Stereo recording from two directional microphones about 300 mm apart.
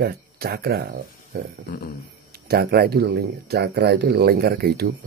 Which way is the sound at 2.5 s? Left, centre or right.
Right.